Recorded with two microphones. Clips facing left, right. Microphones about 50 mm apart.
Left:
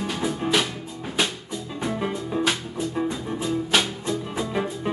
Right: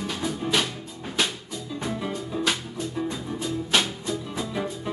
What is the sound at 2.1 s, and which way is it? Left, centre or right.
Music, centre.